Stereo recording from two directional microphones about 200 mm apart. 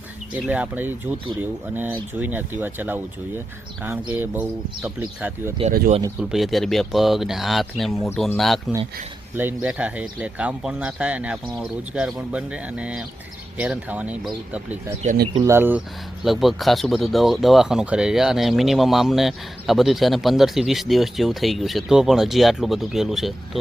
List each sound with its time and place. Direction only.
0.4 s speech: 5° right (ahead or behind)
9.3 s speech: 10° right (ahead or behind)
15.3 s speech: 20° right (ahead or behind)
15.5 s speech: 10° right (ahead or behind)